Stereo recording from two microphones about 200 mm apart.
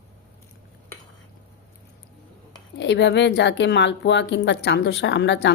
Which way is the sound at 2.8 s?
60° left (ahead or behind).